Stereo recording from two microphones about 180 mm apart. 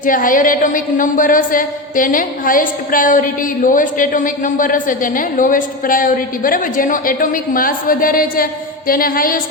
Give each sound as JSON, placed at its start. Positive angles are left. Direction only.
{"t": 0.0, "sound": "speech", "side_deg": 50}